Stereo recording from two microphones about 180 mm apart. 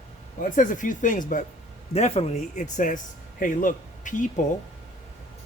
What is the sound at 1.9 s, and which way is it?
A man's voice, 35° left (ahead or behind).